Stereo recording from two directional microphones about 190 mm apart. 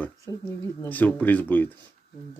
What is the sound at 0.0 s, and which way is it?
Speech, 15° left (ahead or behind).